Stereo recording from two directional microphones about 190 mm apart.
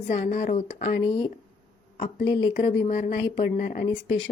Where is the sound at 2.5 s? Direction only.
45° left (ahead or behind).